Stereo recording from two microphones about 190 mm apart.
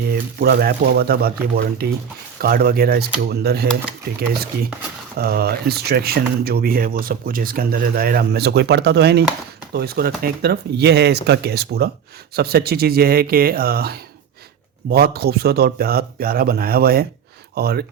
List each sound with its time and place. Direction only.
0.0 s speech: 55° right (ahead or behind)